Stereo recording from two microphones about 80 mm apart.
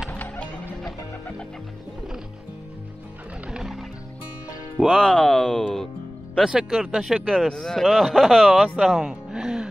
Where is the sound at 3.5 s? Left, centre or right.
Centre.